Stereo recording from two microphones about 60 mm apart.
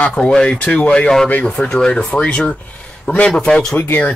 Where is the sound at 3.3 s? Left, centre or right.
Centre.